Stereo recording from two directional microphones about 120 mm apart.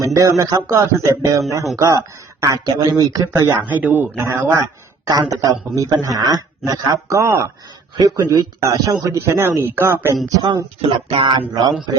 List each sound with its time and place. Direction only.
0.0 s speech: 25° right (ahead or behind)
4.5 s a sound: 30° right (ahead or behind)
5.3 s speech: 30° right (ahead or behind)
10.2 s speech: 35° right (ahead or behind)
10.8 s speech: 50° right (ahead or behind)
11.3 s a sound: 35° right (ahead or behind)